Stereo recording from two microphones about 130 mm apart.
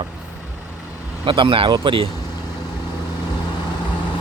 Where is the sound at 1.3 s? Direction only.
40° right (ahead or behind).